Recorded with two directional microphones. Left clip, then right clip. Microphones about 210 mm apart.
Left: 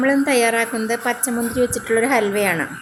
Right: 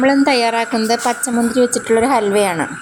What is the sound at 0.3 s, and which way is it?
A woman's voice, 10° right (ahead or behind).